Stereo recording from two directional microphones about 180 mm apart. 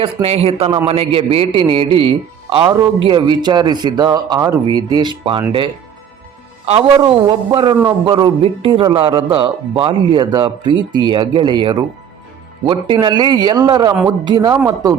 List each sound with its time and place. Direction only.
0.0 s a man's voice: 35° right (ahead or behind)
6.9 s a man's voice: 20° right (ahead or behind)